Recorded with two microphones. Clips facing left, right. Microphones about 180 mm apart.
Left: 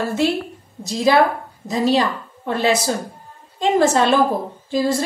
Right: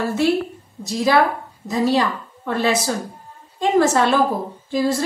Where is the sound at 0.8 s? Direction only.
20° left (ahead or behind).